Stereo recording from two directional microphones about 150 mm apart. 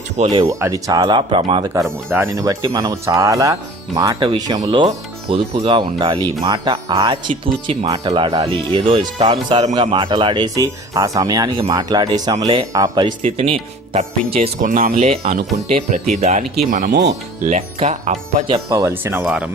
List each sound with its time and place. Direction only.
0.2 s speech: 40° right (ahead or behind)
0.4 s speech: 20° right (ahead or behind)
2.1 s speech: 20° right (ahead or behind)
4.9 s speech: 45° right (ahead or behind)
5.6 s speech: 35° right (ahead or behind)
14.6 s speech: 65° right (ahead or behind)
15.0 s speech: 45° right (ahead or behind); by 17.0 s 60° right (ahead or behind)
17.5 s speech: 50° right (ahead or behind)
18.7 s speech: 20° right (ahead or behind)
19.2 s speech: 5° right (ahead or behind)